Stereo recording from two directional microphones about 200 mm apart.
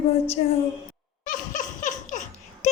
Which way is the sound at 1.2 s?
40° left (ahead or behind).